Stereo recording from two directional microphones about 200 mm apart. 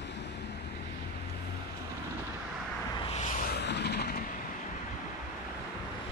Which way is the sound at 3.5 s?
55° left (ahead or behind).